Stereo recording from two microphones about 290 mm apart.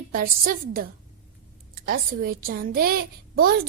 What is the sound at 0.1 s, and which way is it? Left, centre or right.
A woman's voice, right.